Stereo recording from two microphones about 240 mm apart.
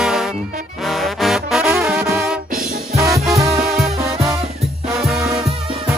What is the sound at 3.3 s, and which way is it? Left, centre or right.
Music, centre.